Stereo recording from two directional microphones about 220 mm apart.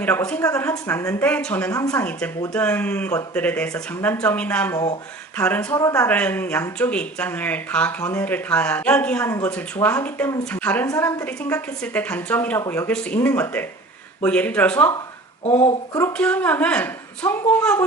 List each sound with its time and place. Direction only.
0.0 s speech: 10° left (ahead or behind)
15.4 s speech: 30° left (ahead or behind)
16.0 s speech: 10° left (ahead or behind)